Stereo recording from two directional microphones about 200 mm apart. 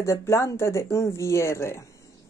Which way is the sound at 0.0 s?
15° left (ahead or behind).